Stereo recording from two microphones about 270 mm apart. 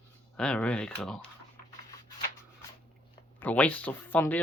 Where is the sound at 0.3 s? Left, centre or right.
Centre.